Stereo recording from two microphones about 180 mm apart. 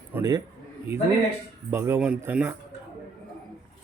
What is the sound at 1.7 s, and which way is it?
Speech, 15° right (ahead or behind).